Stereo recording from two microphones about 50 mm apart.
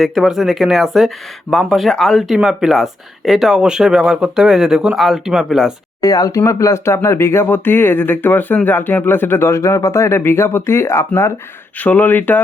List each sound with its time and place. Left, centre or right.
0.0 s speech: centre
2.3 s speech: centre
6.3 s speech: left
7.5 s speech: left
9.4 s speech: left
11.8 s speech: left